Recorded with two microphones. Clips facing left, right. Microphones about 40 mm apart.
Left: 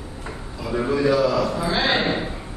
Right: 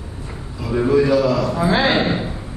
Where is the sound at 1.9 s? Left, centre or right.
Centre.